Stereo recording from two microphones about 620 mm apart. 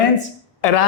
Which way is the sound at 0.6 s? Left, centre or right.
Left.